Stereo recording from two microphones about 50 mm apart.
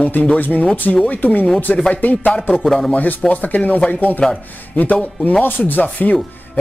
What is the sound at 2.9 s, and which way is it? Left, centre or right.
Speech, left.